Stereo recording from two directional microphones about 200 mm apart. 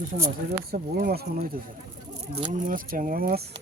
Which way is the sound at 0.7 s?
50° right (ahead or behind).